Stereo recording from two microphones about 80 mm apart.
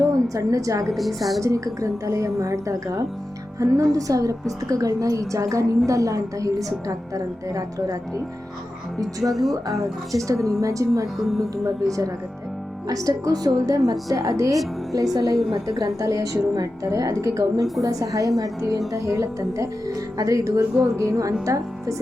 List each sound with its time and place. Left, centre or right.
0.0 s a woman's voice: right
0.9 s a woman's voice: centre
1.4 s a woman's voice: right
9.3 s a woman's voice: centre
9.6 s a woman's voice: right
11.2 s a woman's voice: centre
11.5 s a woman's voice: right